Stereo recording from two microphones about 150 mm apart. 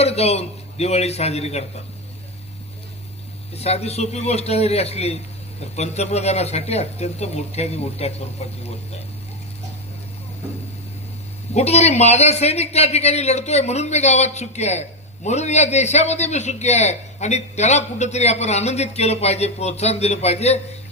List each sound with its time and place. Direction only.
0.0 s a man's voice: 45° left (ahead or behind)
3.5 s a man's voice: 45° left (ahead or behind)
11.5 s a man's voice: 45° left (ahead or behind)